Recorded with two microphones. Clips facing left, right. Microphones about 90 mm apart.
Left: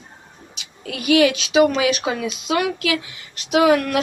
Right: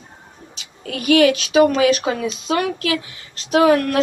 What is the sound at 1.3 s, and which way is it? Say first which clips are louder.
Speech: right 6 dB; 20° left (ahead or behind).